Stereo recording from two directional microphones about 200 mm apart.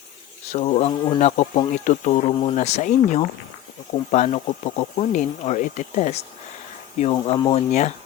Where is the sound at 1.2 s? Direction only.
35° left (ahead or behind).